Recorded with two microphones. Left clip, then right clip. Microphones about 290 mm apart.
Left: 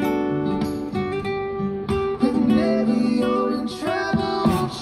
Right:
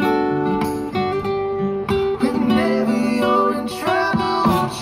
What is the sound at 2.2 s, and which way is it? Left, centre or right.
Music, right.